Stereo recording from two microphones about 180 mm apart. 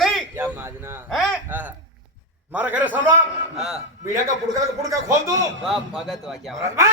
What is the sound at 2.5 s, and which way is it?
A man's voice, 10° right (ahead or behind).